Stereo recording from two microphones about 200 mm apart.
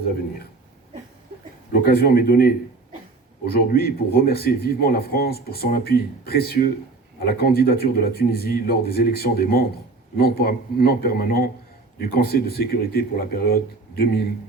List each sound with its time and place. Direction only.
1.7 s speech: 50° left (ahead or behind)